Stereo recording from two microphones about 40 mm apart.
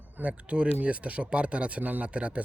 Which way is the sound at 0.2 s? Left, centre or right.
Right.